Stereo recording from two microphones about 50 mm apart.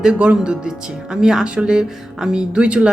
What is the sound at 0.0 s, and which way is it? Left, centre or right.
Speech, centre.